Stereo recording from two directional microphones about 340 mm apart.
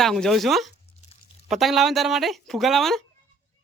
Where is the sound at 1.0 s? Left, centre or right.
Left.